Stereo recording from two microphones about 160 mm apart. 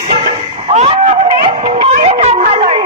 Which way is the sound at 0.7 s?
35° right (ahead or behind).